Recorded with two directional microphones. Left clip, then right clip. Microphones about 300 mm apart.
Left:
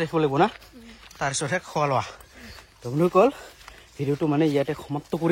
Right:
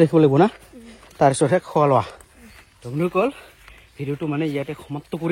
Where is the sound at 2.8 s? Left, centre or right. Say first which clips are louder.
Left 2 dB; centre.